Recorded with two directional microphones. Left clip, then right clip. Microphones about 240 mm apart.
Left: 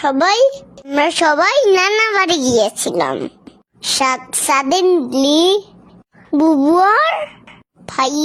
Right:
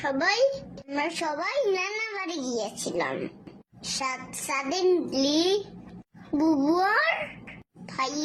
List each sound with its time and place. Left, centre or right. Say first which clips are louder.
0.0 s a child's voice: left 11 dB; left